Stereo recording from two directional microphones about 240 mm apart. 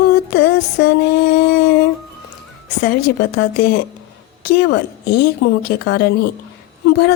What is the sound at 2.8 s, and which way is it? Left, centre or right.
A woman's voice, left.